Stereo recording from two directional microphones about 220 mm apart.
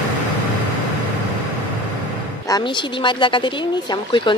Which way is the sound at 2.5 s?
20° left (ahead or behind).